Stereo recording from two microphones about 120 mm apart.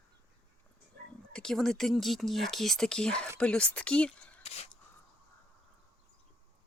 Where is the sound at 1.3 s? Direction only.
5° left (ahead or behind).